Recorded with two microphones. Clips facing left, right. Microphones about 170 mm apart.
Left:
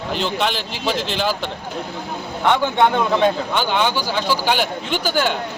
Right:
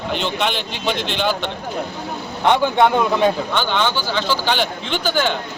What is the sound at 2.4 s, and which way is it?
Speech, 15° right (ahead or behind).